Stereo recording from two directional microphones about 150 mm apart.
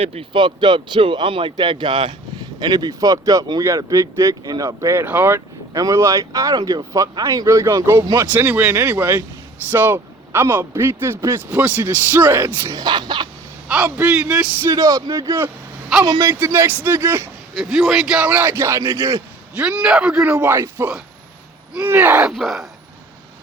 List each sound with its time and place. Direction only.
0.0 s speech: 40° right (ahead or behind); by 8.3 s 25° right (ahead or behind)
8.3 s speech: 10° right (ahead or behind); by 13.2 s 30° right (ahead or behind)
13.7 s speech: 5° right (ahead or behind)
14.7 s speech: 20° right (ahead or behind)
17.6 s speech: centre (ahead or behind); by 19.2 s 20° right (ahead or behind)
19.5 s speech: 5° right (ahead or behind)